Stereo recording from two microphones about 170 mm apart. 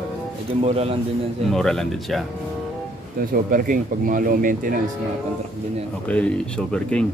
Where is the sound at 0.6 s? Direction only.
35° right (ahead or behind).